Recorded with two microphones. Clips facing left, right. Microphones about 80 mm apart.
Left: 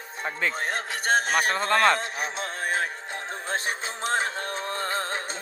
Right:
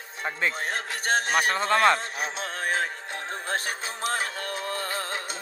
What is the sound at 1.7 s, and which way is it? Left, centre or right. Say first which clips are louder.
Speech: even; centre.